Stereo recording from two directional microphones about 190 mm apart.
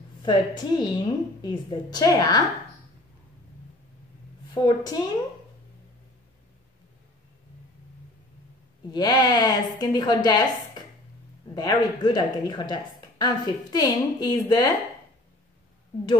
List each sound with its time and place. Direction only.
0.2 s speech: 25° left (ahead or behind)
4.6 s speech: 25° left (ahead or behind)
8.9 s speech: 20° left (ahead or behind)